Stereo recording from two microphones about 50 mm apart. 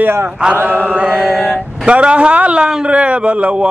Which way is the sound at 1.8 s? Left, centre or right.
Right.